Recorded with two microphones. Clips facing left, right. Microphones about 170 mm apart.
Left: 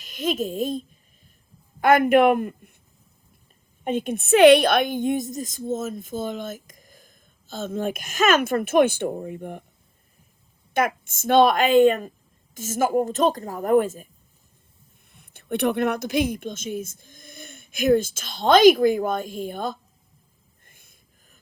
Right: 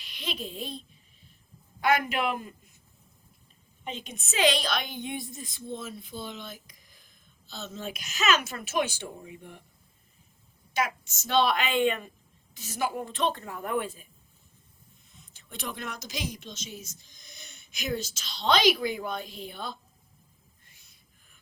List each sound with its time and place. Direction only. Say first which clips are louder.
0.0 s a child's voice: left 12 dB; 45° left (ahead or behind)
3.8 s a woman's voice: left 15 dB; 55° left (ahead or behind)
10.8 s a woman's voice: left 7 dB; 55° left (ahead or behind)
15.0 s a woman's voice: left 16 dB; 60° left (ahead or behind)
20.7 s a sound: left 5 dB; 50° left (ahead or behind)